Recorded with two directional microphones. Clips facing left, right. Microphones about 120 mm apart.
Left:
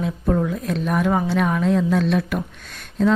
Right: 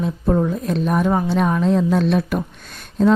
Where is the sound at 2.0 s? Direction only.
35° right (ahead or behind).